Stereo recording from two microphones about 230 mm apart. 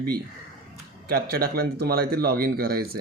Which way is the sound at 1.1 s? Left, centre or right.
Right.